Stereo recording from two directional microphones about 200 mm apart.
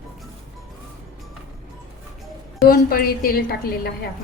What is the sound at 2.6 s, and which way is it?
A woman's voice, 45° left (ahead or behind).